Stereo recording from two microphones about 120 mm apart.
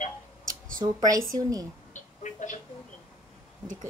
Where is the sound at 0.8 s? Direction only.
30° right (ahead or behind).